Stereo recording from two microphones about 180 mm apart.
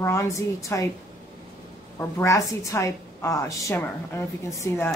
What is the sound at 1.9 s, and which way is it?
A woman's voice, 15° left (ahead or behind).